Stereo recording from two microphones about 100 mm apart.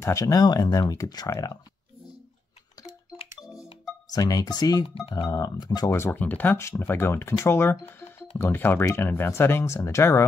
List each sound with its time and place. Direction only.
0.0 s speech: 30° left (ahead or behind)
4.1 s speech: 35° left (ahead or behind)
5.9 s speech: 25° left (ahead or behind)